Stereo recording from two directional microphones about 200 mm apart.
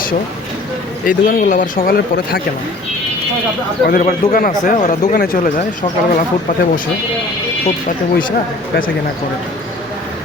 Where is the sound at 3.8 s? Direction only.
45° left (ahead or behind).